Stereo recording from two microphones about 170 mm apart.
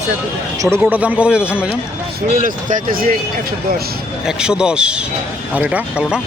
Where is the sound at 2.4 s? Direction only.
50° right (ahead or behind).